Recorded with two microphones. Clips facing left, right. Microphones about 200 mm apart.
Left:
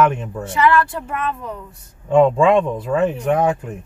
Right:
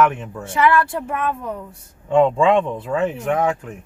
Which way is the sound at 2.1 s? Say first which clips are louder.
Left 2 dB; 15° left (ahead or behind).